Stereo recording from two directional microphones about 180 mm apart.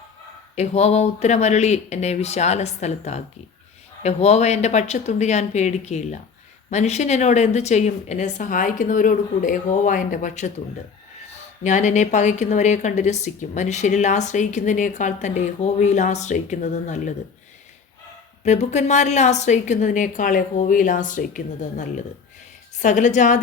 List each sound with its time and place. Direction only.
0.5 s a woman's voice: 35° left (ahead or behind)
11.6 s a woman's voice: 40° left (ahead or behind)
18.4 s a woman's voice: 40° left (ahead or behind)